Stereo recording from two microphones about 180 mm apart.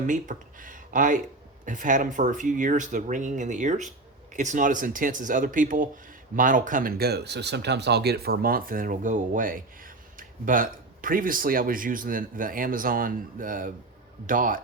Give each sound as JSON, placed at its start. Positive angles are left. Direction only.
{"t": 0.1, "sound": "speech", "side_deg": -45}